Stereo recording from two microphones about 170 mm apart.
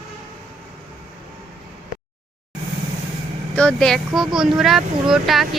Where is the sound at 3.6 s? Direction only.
5° left (ahead or behind).